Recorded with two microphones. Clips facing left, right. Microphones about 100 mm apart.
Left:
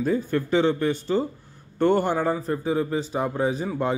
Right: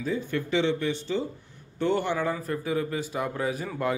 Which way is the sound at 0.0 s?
45° left (ahead or behind).